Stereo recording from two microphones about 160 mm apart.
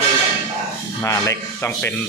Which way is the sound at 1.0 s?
20° left (ahead or behind).